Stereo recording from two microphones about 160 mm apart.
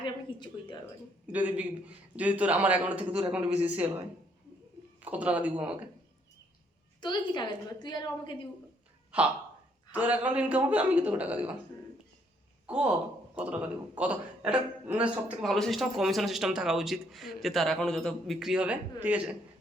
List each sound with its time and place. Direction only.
0.0 s a sound: 30° left (ahead or behind)
1.3 s a man's voice: 10° right (ahead or behind)
5.0 s a man's voice: 10° right (ahead or behind)
7.0 s a woman's voice: 30° left (ahead or behind)
9.9 s a man's voice: 10° right (ahead or behind)
12.6 s a man's voice: 10° right (ahead or behind)